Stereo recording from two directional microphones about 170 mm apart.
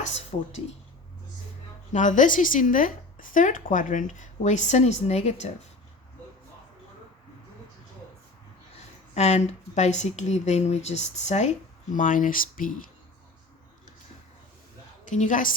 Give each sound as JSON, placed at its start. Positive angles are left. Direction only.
{"t": 0.0, "sound": "speech", "side_deg": 40}
{"t": 1.9, "sound": "speech", "side_deg": 45}
{"t": 9.1, "sound": "speech", "side_deg": 40}
{"t": 15.1, "sound": "speech", "side_deg": 50}